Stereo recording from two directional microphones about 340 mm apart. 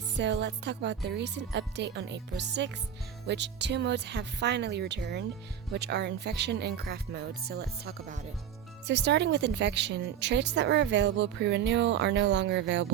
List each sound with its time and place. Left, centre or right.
0.2 s a woman's voice: right